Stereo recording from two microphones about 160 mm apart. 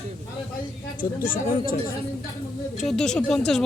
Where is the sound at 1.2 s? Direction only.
60° left (ahead or behind).